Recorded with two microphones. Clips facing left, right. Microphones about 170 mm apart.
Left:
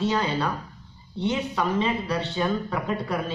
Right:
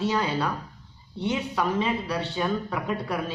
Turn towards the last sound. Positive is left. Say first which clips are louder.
# left 1 dB
turn(degrees=-5)  # may be behind; listen again after turning